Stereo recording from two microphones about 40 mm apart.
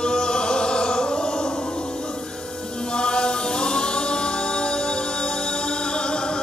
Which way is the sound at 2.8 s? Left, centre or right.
Centre.